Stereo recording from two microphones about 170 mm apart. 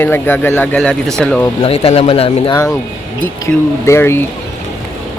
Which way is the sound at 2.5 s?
15° left (ahead or behind).